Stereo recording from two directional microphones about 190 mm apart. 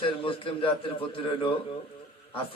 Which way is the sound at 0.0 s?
30° left (ahead or behind).